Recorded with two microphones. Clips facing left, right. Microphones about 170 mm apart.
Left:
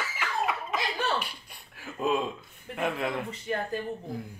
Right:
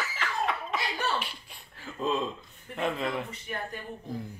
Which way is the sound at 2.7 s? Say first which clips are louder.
Even; 5° left (ahead or behind).